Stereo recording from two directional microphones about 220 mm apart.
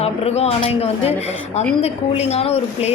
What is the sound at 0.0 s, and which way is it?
Speech, 25° left (ahead or behind).